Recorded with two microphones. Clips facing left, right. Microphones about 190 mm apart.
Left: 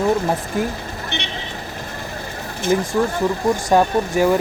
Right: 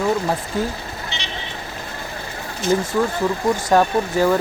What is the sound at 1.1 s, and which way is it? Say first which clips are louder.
Vehicle: left 5 dB; 60° left (ahead or behind).